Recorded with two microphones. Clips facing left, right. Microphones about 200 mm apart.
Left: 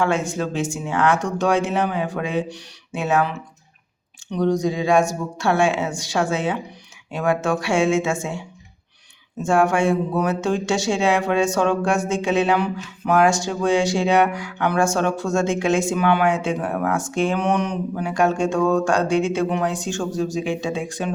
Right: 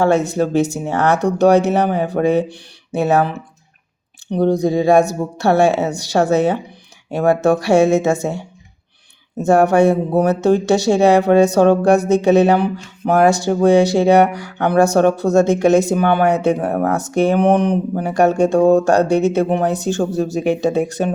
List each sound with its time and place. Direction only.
0.0 s speech: 40° right (ahead or behind)
4.5 s speech: 35° right (ahead or behind)
19.0 s speech: 65° right (ahead or behind)
19.5 s speech: 35° right (ahead or behind)
19.7 s speech: 65° right (ahead or behind)
21.0 s speech: 50° right (ahead or behind)